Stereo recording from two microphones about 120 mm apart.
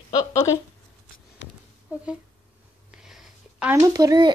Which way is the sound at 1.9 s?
15° right (ahead or behind).